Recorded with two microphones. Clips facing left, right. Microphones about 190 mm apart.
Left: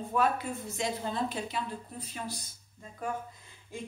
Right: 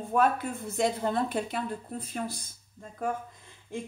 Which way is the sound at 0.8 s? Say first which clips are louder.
Right 6 dB; 55° right (ahead or behind).